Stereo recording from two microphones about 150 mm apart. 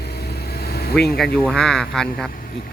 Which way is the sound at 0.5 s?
90° left.